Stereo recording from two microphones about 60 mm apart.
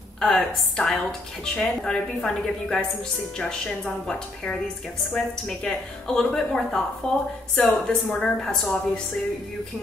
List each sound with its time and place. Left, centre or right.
0.2 s a woman's voice: centre